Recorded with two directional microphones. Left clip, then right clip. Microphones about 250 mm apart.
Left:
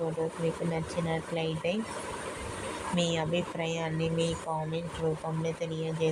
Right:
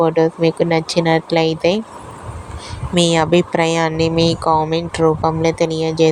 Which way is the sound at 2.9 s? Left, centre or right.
Right.